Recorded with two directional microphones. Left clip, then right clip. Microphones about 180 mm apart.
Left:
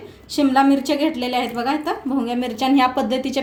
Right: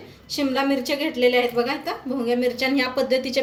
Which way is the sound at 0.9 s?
50° left (ahead or behind).